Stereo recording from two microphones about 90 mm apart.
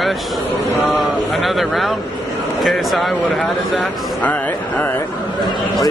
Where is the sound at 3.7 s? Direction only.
15° left (ahead or behind).